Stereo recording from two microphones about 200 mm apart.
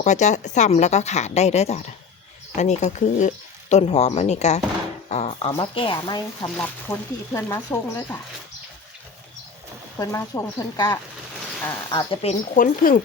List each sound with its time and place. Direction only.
0.0 s speech: 35° left (ahead or behind)
6.6 s speech: 10° left (ahead or behind)
10.0 s speech: 15° left (ahead or behind)
12.2 s speech: 35° left (ahead or behind)